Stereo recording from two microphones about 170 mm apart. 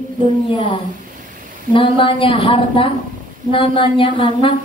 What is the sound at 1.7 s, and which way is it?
A woman's voice, 30° left (ahead or behind).